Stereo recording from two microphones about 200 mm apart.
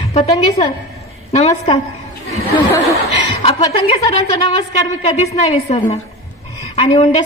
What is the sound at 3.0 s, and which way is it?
A woman's voice, 30° left (ahead or behind).